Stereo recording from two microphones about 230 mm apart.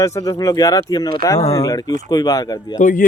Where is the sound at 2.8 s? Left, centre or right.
Left.